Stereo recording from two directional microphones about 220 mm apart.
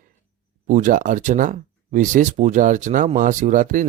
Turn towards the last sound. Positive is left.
turn(degrees=-35)  # may be behind; listen again after turning